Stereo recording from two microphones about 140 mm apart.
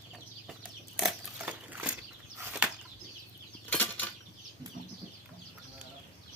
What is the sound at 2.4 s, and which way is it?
Bird flight, 10° right (ahead or behind).